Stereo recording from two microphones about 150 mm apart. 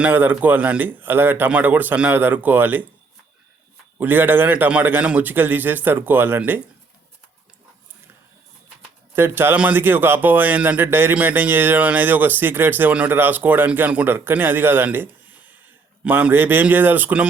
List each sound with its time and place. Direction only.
0.0 s speech: 15° right (ahead or behind)
3.9 s speech: 15° right (ahead or behind)
9.1 s speech: 15° right (ahead or behind)